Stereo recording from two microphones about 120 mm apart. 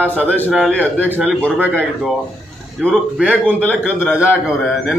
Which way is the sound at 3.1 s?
10° right (ahead or behind).